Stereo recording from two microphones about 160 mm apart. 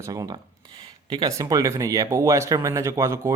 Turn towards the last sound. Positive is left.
turn(degrees=-20)  # may be behind; listen again after turning